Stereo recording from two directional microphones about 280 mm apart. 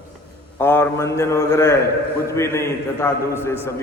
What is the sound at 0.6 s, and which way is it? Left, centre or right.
A man's voice, centre.